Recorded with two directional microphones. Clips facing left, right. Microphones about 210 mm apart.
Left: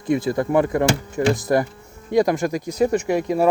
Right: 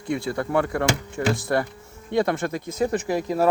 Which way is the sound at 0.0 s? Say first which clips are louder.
Left 6 dB; 20° left (ahead or behind).